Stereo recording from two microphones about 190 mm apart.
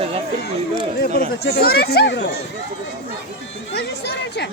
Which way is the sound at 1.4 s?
55° left (ahead or behind).